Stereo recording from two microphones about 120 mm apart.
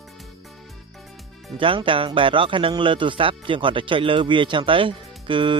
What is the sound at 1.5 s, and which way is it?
Speech, 45° right (ahead or behind).